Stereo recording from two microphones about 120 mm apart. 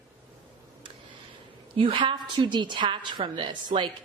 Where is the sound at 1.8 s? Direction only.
45° right (ahead or behind).